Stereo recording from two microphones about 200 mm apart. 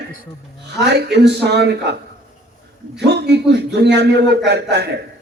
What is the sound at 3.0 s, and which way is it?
A man's voice, 55° right (ahead or behind).